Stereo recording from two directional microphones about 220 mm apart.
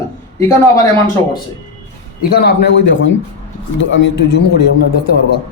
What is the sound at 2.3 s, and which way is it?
A man's voice, 45° left (ahead or behind).